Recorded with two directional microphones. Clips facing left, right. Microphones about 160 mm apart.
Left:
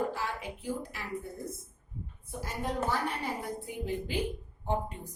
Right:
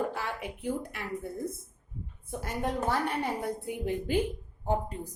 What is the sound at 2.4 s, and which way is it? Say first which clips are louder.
A woman's voice: right 2 dB; 55° right (ahead or behind).